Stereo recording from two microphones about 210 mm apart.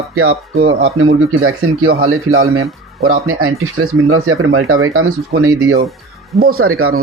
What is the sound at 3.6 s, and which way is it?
Speech, 75° right (ahead or behind).